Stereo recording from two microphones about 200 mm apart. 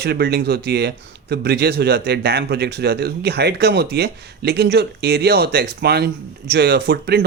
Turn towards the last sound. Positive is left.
turn(degrees=-50)  # may be behind; listen again after turning